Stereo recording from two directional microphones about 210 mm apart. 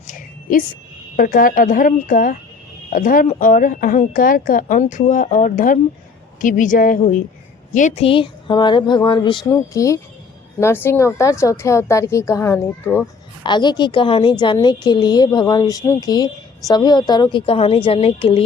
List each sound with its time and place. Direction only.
1.1 s a woman's voice: 40° left (ahead or behind); by 13.1 s 10° left (ahead or behind)
13.4 s a woman's voice: 20° left (ahead or behind)